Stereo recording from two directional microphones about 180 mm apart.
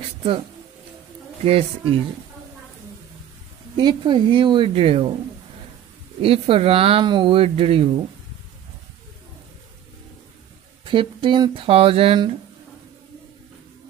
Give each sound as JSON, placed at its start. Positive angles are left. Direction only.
{"t": 1.4, "sound": "speech", "side_deg": -35}
{"t": 3.7, "sound": "speech", "side_deg": -25}
{"t": 6.2, "sound": "speech", "side_deg": -30}
{"t": 10.9, "sound": "speech", "side_deg": -25}